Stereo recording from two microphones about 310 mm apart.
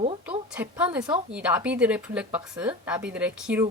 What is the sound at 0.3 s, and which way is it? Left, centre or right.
A woman's voice, centre.